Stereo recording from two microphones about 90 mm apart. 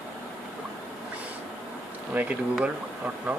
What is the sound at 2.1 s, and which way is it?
Speech, 20° right (ahead or behind).